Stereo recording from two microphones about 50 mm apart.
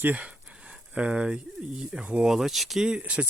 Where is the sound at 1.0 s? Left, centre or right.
Right.